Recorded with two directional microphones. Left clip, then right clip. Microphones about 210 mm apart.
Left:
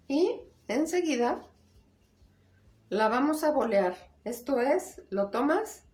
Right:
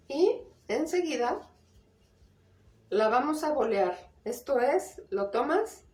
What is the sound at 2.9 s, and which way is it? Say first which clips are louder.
A woman's voice: right 1 dB; 30° left (ahead or behind).